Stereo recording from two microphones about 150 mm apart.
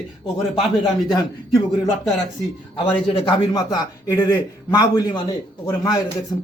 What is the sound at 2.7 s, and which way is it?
A man's voice, 35° left (ahead or behind).